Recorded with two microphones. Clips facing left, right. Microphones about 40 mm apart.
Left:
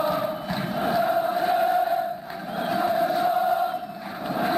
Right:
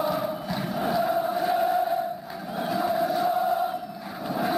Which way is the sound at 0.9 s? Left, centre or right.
Left.